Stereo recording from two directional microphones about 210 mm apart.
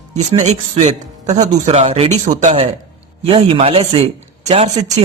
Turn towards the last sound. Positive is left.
turn(degrees=-25)  # may be behind; listen again after turning